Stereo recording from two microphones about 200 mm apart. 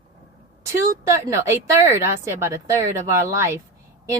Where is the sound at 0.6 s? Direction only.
15° right (ahead or behind).